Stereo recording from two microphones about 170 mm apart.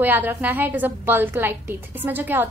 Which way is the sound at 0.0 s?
10° right (ahead or behind).